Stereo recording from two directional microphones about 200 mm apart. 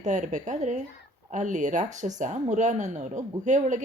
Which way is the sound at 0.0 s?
35° right (ahead or behind).